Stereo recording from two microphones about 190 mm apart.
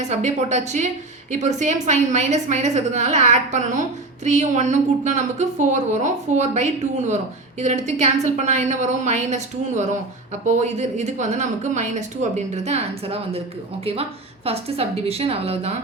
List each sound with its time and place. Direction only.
0.0 s a woman's voice: 40° right (ahead or behind)
14.4 s a woman's voice: 30° right (ahead or behind)